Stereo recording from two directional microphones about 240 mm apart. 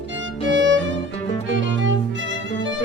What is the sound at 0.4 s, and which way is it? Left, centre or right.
Violin, right.